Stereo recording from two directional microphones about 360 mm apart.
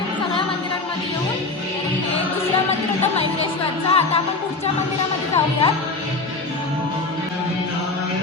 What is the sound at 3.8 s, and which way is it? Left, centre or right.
Speech, centre.